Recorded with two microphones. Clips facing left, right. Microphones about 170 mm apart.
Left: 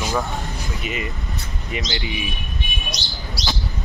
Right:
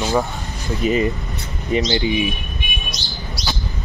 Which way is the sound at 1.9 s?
20° right (ahead or behind).